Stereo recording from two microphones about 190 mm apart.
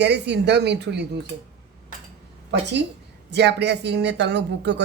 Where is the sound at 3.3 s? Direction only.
60° right (ahead or behind).